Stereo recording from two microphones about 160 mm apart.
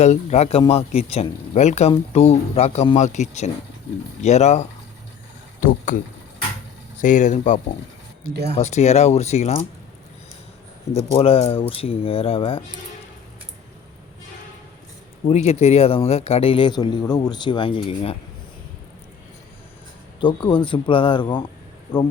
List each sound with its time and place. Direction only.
0.0 s a man's voice: 45° left (ahead or behind)
5.5 s speech: 55° left (ahead or behind)
7.0 s speech: 50° left (ahead or behind)
8.3 s speech: 90° right
8.5 s speech: 45° left (ahead or behind)
10.9 s a man's voice: 35° left (ahead or behind)
15.3 s a man's voice: 40° left (ahead or behind)
20.2 s a man's voice: 30° left (ahead or behind)